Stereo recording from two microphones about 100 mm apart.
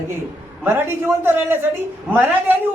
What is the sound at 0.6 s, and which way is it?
Speech, 20° right (ahead or behind).